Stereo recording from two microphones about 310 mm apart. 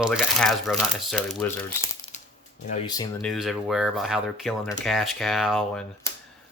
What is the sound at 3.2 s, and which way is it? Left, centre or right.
Speech, centre.